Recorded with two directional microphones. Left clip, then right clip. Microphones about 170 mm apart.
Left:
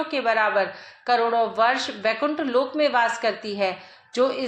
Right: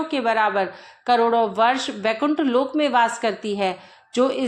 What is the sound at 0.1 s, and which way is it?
A woman's voice, 35° right (ahead or behind).